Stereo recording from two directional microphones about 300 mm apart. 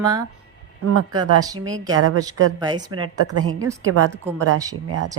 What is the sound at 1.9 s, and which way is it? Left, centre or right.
Speech, right.